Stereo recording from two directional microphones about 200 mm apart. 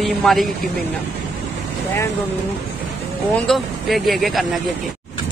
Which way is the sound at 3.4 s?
Centre (ahead or behind).